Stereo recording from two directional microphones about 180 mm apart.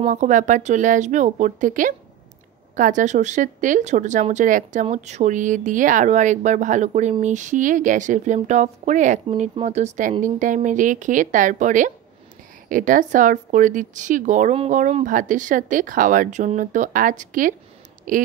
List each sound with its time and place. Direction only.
0.0 s speech: 45° right (ahead or behind)